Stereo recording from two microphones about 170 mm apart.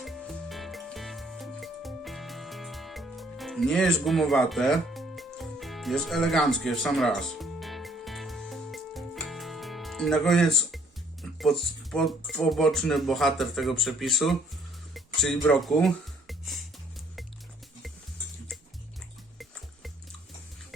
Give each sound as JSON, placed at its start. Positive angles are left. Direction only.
{"t": 0.0, "sound": "music", "side_deg": 0}
{"t": 11.2, "sound": "speech", "side_deg": 0}
{"t": 14.9, "sound": "music", "side_deg": 0}